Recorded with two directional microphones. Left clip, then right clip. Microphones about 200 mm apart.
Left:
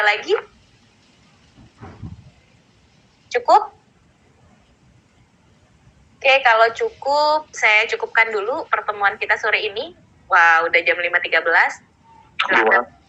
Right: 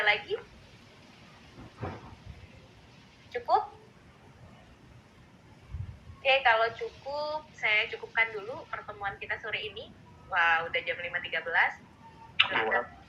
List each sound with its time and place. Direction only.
0.0 s a woman's voice: 45° left (ahead or behind)
3.2 s speech: 45° left (ahead or behind)
6.2 s a woman's voice: 45° left (ahead or behind)